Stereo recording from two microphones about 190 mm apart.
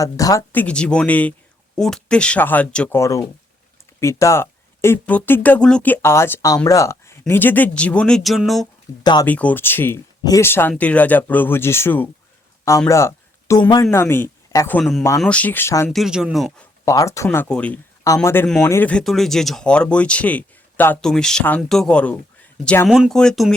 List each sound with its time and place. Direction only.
0.0 s speech: 20° left (ahead or behind); by 8.6 s centre (ahead or behind)
8.9 s a woman's voice: 15° left (ahead or behind)
14.8 s speech: centre (ahead or behind)
15.9 s speech: centre (ahead or behind)
16.8 s speech: 15° left (ahead or behind)